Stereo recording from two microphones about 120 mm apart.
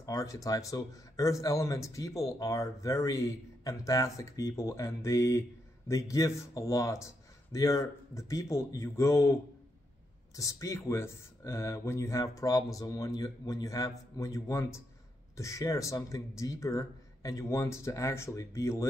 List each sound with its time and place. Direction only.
0.0 s speech: 25° left (ahead or behind)